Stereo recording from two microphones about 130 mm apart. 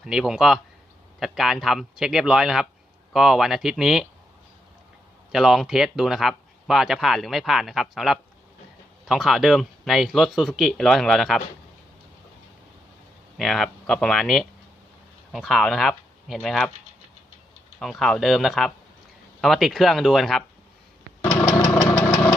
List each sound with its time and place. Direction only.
0.0 s speech: 5° right (ahead or behind)
5.3 s speech: centre (ahead or behind)
13.3 s speech: centre (ahead or behind)
17.7 s speech: centre (ahead or behind)
21.2 s engine: 15° left (ahead or behind)